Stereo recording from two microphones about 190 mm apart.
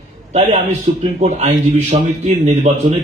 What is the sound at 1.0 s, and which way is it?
A man's voice, 35° right (ahead or behind).